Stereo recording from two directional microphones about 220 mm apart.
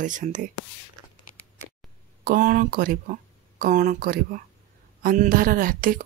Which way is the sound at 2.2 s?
40° right (ahead or behind).